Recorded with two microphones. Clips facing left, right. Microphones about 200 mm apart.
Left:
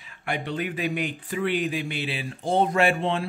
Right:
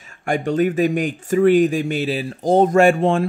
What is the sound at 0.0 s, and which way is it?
Speech, 45° right (ahead or behind).